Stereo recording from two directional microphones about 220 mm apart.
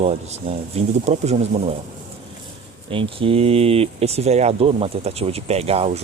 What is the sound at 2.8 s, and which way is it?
Speech, 25° right (ahead or behind).